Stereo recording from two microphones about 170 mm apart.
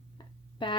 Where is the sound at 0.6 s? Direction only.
30° left (ahead or behind).